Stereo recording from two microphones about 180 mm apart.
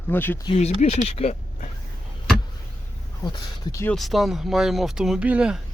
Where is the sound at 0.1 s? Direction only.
10° left (ahead or behind).